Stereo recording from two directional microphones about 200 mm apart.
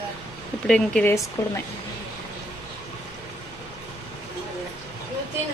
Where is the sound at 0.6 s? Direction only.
5° left (ahead or behind).